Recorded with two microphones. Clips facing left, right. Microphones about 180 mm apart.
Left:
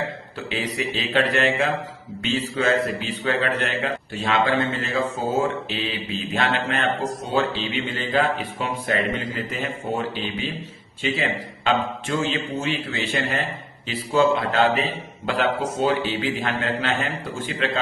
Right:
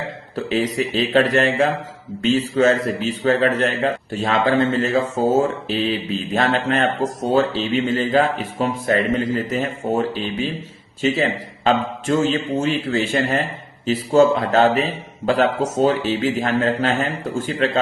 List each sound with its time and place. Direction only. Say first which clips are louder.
0.3 s a man's voice: right 8 dB; 40° right (ahead or behind)